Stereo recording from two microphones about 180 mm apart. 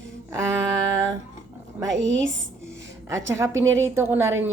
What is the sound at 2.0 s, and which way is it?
Speech, 90° right.